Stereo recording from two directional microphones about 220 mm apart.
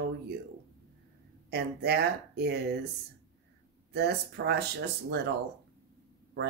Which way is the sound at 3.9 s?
50° right (ahead or behind).